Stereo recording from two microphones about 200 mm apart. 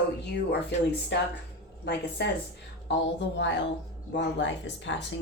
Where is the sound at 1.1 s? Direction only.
60° left (ahead or behind).